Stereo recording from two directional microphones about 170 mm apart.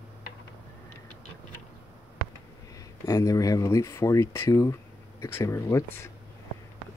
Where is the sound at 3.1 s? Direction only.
20° left (ahead or behind).